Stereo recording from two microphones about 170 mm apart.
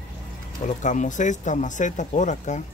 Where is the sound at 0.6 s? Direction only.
45° left (ahead or behind).